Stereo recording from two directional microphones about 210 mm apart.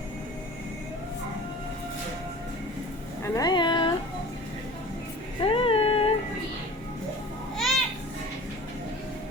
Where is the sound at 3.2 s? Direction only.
20° left (ahead or behind).